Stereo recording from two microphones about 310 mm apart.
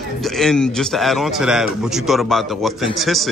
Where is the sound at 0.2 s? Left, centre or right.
Centre.